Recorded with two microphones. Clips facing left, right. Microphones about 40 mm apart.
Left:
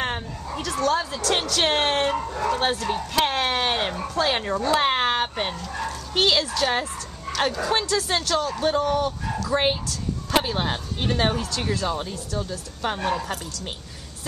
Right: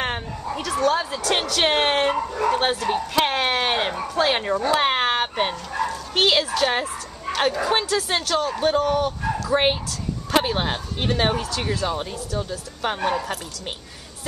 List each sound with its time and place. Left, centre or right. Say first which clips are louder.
0.0 s speech: right 2 dB; centre
7.8 s speech: right 1 dB; centre